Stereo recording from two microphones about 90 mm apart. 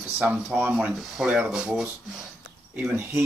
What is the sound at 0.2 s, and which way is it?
Speech, 15° right (ahead or behind).